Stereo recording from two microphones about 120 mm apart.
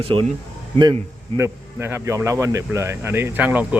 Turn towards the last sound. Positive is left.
turn(degrees=-10)  # may be behind; listen again after turning